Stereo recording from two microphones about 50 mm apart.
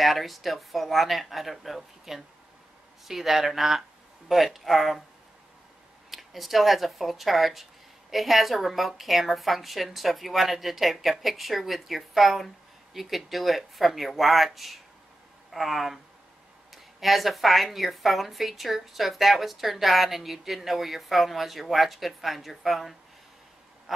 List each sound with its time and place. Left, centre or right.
0.0 s speech: centre
6.0 s speech: centre